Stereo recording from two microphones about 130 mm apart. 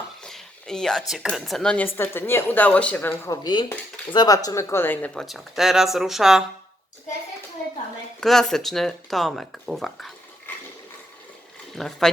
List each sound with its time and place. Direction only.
0.2 s speech: 5° left (ahead or behind)
3.2 s speech: 35° left (ahead or behind); by 5.1 s 15° left (ahead or behind)
5.1 s speech: centre (ahead or behind)
8.2 s speech: 5° left (ahead or behind)
11.8 s speech: 5° left (ahead or behind)